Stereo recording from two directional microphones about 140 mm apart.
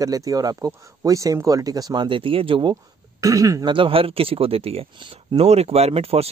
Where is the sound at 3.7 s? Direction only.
40° right (ahead or behind).